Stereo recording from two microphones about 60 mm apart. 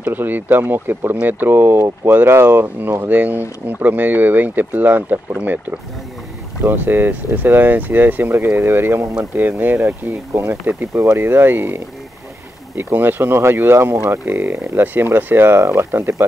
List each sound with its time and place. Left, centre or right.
0.0 s speech: right
3.1 s speech: right
11.1 s speech: right